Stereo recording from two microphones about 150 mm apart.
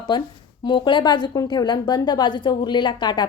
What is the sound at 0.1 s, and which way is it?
A woman's voice, 30° left (ahead or behind).